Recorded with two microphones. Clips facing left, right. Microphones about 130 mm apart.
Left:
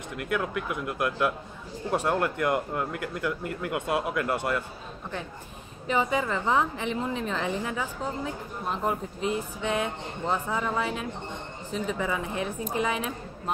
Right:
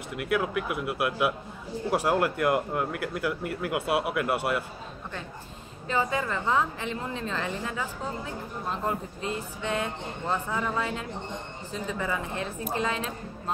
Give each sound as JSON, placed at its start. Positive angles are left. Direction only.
{"t": 0.2, "sound": "speech", "side_deg": -5}
{"t": 5.9, "sound": "a woman's voice", "side_deg": 20}